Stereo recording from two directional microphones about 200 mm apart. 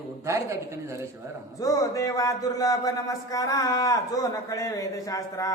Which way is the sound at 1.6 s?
15° left (ahead or behind).